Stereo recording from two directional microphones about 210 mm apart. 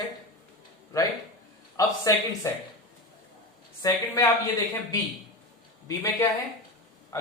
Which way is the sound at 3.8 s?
15° left (ahead or behind).